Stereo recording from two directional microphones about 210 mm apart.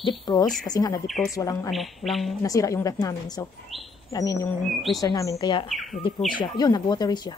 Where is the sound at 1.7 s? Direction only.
Centre (ahead or behind).